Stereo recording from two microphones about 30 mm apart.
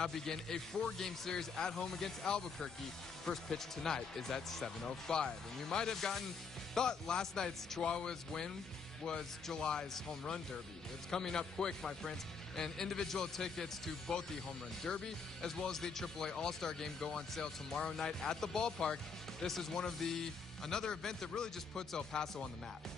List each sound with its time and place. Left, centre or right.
0.0 s speech: centre
3.3 s speech: centre
4.8 s speech: left
5.9 s speech: centre
6.7 s speech: left
19.4 s speech: centre
20.8 s speech: left